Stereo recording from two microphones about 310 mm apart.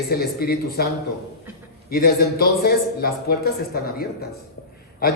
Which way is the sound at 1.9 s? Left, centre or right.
Left.